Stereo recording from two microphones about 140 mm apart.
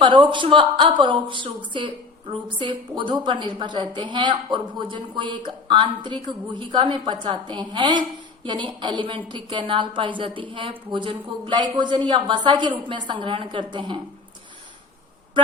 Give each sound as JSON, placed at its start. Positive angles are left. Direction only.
{"t": 0.0, "sound": "a woman's voice", "side_deg": -35}